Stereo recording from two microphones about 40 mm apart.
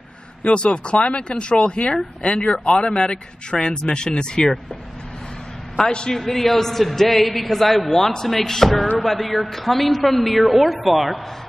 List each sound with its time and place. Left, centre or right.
0.4 s speech: left
5.9 s speech: left
6.1 s a man's voice: centre